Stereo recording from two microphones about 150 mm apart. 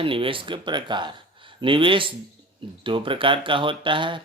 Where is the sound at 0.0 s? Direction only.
35° right (ahead or behind).